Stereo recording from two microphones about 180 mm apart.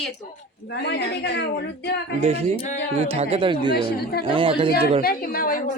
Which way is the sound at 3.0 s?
35° right (ahead or behind).